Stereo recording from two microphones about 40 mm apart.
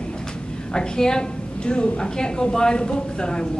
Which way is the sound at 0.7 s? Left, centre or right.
Centre.